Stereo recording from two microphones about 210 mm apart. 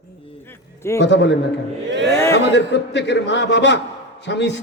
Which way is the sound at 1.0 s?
60° left (ahead or behind).